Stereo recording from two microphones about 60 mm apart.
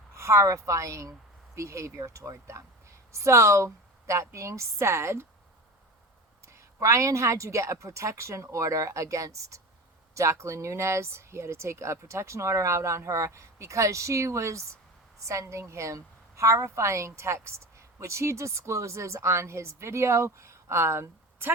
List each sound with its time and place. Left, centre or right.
0.1 s a woman's voice: right
6.5 s a woman's voice: right